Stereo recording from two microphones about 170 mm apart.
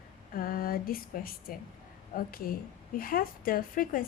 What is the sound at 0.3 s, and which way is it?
A woman's voice, 60° left (ahead or behind).